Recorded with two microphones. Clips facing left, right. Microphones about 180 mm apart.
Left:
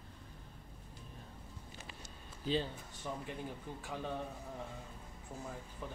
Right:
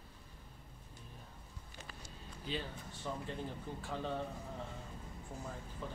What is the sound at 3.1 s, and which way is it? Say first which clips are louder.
A man's voice: even; 10° left (ahead or behind).